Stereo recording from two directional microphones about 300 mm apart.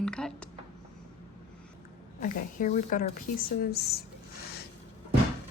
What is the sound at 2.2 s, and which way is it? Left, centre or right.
Speech, left.